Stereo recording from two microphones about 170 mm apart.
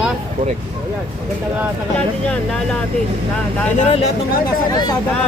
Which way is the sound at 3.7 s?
40° left (ahead or behind).